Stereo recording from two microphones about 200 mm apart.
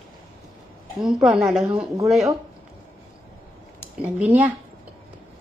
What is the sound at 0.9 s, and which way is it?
Speech, centre (ahead or behind).